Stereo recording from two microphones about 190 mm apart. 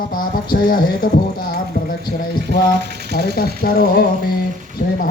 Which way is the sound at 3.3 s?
55° left (ahead or behind).